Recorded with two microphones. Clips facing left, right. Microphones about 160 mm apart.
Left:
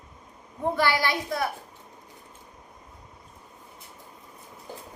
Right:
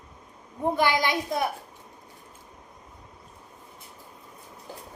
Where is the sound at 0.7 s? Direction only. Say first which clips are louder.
Right 1 dB; 20° right (ahead or behind).